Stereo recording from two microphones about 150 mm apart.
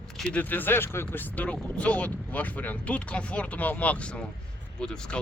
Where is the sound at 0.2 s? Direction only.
10° left (ahead or behind).